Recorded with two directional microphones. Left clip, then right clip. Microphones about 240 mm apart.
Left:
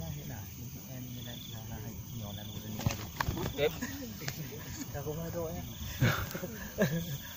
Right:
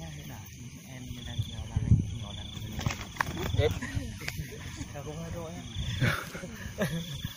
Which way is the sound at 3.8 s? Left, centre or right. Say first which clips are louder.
Right 2 dB; left.